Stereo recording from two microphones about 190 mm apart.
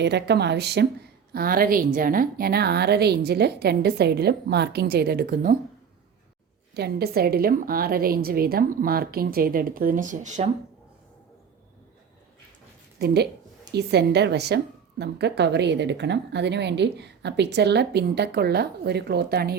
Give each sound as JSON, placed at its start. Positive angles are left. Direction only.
{"t": 0.0, "sound": "a woman's voice", "side_deg": -60}
{"t": 6.7, "sound": "a woman's voice", "side_deg": -55}
{"t": 13.7, "sound": "a woman's voice", "side_deg": -60}